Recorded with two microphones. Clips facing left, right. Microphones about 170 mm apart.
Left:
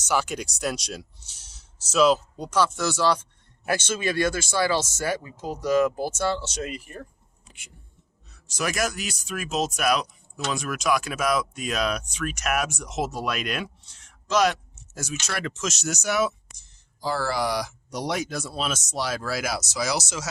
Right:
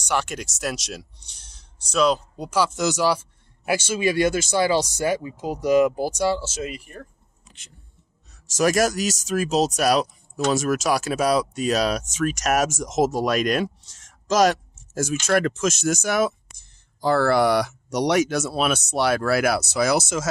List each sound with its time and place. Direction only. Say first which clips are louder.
0.0 s speech: even; centre (ahead or behind)
2.5 s speech: right 2 dB; 15° right (ahead or behind); by 7.1 s centre (ahead or behind)
8.3 s speech: right 9 dB; 45° right (ahead or behind)